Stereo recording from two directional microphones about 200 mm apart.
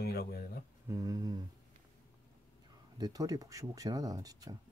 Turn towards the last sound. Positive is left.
turn(degrees=-20)  # may be behind; listen again after turning